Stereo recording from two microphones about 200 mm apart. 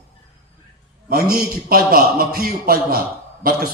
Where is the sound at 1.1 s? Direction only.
50° right (ahead or behind).